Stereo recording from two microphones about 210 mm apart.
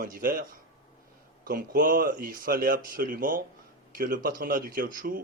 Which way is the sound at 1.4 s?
40° right (ahead or behind).